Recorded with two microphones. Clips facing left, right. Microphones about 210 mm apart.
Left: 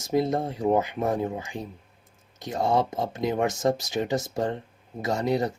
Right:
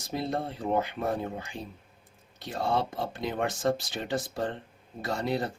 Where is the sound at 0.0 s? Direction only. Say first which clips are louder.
Left 7 dB; 45° left (ahead or behind).